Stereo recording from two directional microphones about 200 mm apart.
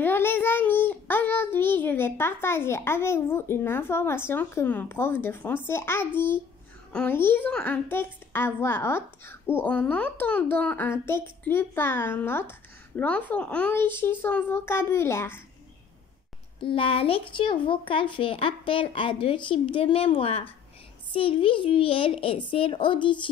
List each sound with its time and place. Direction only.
0.0 s child singing: 10° left (ahead or behind)
5.7 s a woman's voice: 10° left (ahead or behind)
16.6 s speech: 25° left (ahead or behind)